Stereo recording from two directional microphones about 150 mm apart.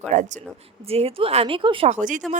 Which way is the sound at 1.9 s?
60° right (ahead or behind).